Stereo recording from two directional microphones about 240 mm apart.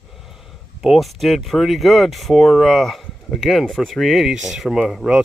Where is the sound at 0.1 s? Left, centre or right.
Centre.